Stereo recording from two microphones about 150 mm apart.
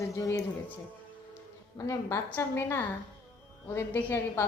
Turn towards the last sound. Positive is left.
turn(degrees=15)  # may be behind; listen again after turning